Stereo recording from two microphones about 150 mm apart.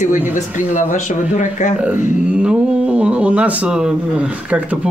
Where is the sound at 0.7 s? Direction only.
55° left (ahead or behind).